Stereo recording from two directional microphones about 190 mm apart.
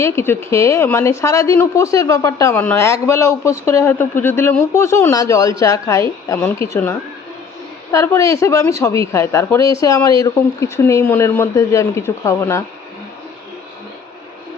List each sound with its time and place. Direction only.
0.0 s a woman's voice: 15° left (ahead or behind)
7.9 s a woman's voice: 15° left (ahead or behind)